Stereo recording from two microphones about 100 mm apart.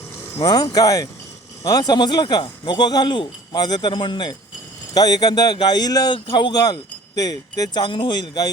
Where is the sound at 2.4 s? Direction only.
60° left (ahead or behind).